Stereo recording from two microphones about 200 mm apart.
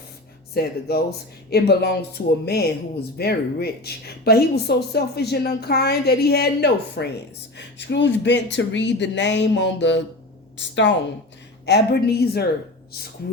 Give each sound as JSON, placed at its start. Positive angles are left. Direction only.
{"t": 0.5, "sound": "speech", "side_deg": 50}